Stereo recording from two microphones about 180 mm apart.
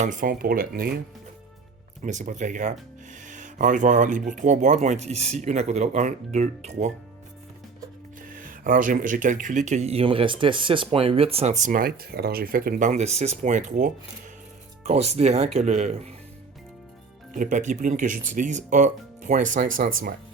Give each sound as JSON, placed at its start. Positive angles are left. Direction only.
{"t": 0.0, "sound": "speech", "side_deg": -45}
{"t": 2.0, "sound": "speech", "side_deg": -40}
{"t": 8.2, "sound": "speech", "side_deg": -50}
{"t": 17.3, "sound": "speech", "side_deg": -45}